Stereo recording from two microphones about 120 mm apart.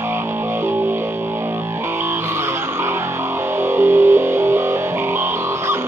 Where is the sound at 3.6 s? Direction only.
20° right (ahead or behind).